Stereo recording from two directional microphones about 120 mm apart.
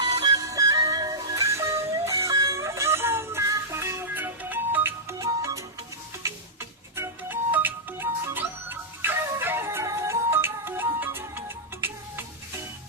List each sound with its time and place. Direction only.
0.2 s music: 30° right (ahead or behind)
6.9 s music: 20° right (ahead or behind)